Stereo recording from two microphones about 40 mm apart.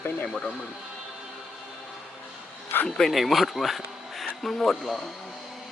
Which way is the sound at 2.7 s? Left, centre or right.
Left.